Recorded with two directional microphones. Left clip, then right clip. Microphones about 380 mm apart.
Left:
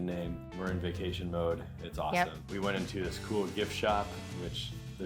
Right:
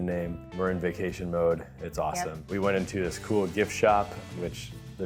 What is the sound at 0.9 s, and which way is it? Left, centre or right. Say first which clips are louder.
Speech: right 7 dB; right.